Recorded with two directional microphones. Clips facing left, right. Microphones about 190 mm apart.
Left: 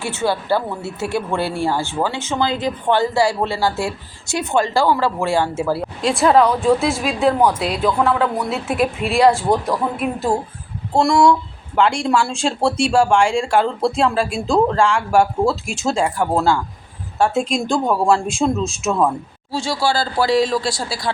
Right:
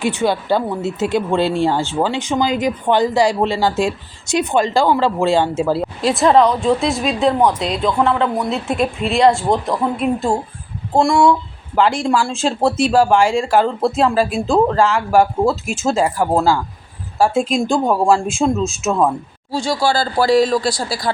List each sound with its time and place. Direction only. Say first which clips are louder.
0.0 s speech: right 3 dB; 15° right (ahead or behind)
6.0 s speech: right 1 dB; centre (ahead or behind)